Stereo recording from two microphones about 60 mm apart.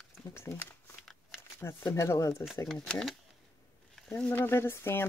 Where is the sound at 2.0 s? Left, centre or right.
Left.